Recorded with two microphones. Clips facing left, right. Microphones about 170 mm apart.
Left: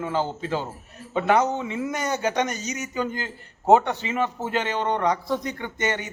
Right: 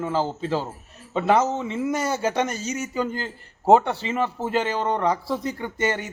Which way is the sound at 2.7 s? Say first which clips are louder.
Right 2 dB; 30° right (ahead or behind).